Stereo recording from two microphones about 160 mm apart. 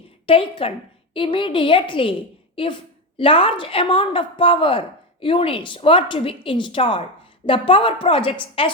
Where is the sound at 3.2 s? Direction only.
35° left (ahead or behind).